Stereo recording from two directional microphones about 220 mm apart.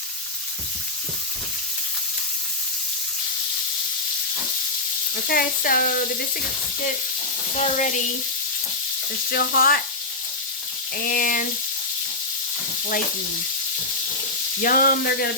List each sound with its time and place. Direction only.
5.3 s sizzle: 40° left (ahead or behind)
7.5 s sizzle: 35° left (ahead or behind)
9.3 s speech: 45° left (ahead or behind)
10.9 s sizzle: 40° left (ahead or behind)
14.6 s sizzle: 40° left (ahead or behind)